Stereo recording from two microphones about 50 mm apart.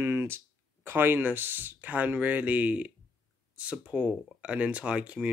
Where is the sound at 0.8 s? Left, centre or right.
Right.